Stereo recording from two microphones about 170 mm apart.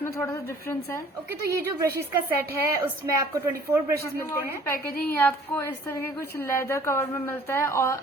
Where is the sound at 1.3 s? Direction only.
20° right (ahead or behind).